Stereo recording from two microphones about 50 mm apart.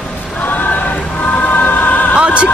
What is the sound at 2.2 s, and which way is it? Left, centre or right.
Music, right.